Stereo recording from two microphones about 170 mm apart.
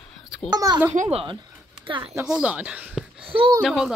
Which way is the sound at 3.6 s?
5° right (ahead or behind).